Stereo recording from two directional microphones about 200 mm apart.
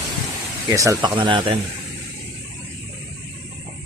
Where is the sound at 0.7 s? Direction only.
15° right (ahead or behind).